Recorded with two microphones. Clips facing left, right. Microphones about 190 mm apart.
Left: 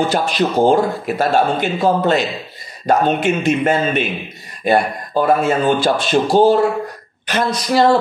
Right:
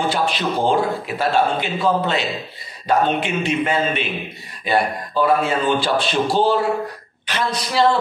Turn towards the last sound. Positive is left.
turn(degrees=45)  # may be behind; listen again after turning